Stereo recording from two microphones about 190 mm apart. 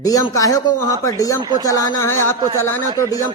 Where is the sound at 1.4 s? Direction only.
20° right (ahead or behind).